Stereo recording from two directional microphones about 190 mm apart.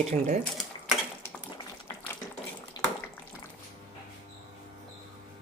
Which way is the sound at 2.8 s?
20° left (ahead or behind).